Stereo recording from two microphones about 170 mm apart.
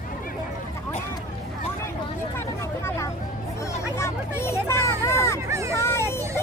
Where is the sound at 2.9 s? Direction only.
15° left (ahead or behind).